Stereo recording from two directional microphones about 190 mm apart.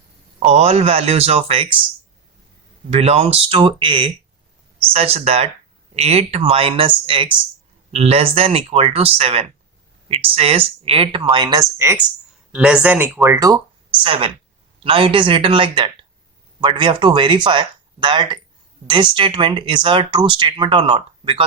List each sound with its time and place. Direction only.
0.3 s speech: 35° right (ahead or behind)
2.9 s speech: 30° right (ahead or behind)
12.5 s speech: 5° right (ahead or behind)
14.0 s speech: 30° right (ahead or behind)